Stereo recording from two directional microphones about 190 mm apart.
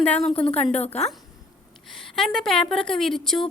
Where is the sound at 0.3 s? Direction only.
30° left (ahead or behind).